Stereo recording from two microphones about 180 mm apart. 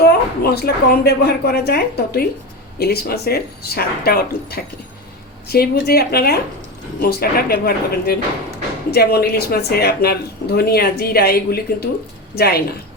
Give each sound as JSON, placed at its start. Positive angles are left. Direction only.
{"t": 0.0, "sound": "a woman's voice", "side_deg": 60}